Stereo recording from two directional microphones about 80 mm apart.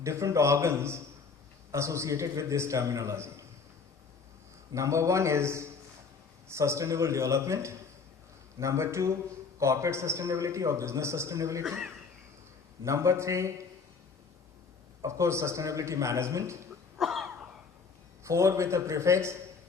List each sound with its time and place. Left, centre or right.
0.0 s a man's voice: right
4.7 s a man's voice: right
12.8 s a man's voice: right
15.0 s a man's voice: right
17.0 s cough: centre
18.2 s a man's voice: right